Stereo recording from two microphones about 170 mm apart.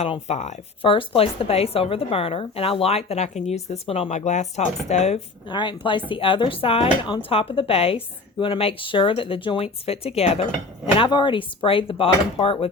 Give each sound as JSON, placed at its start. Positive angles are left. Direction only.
{"t": 0.0, "sound": "speech", "side_deg": 40}
{"t": 5.5, "sound": "speech", "side_deg": 30}